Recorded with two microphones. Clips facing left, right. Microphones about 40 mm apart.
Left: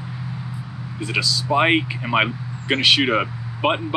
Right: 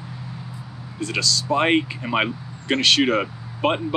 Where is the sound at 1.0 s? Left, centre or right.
Centre.